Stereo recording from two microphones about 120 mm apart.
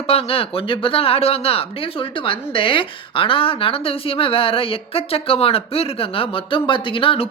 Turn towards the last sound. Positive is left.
turn(degrees=45)  # may be behind; listen again after turning